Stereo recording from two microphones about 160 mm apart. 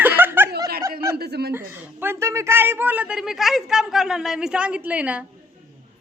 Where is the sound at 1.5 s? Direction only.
15° right (ahead or behind).